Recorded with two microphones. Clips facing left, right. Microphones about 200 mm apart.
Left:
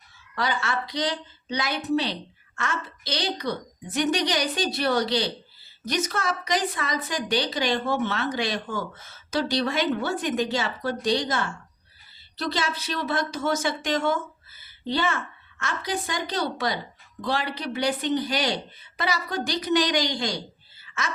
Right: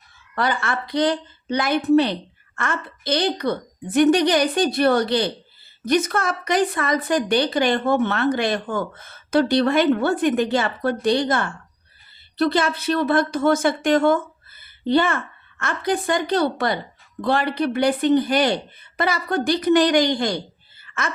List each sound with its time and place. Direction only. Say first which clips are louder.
0.3 s a woman's voice: right 4 dB; 55° right (ahead or behind)
20.8 s wail: right 4 dB; 55° right (ahead or behind)